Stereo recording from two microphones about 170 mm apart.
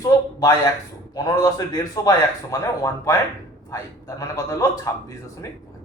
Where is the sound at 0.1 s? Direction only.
20° left (ahead or behind).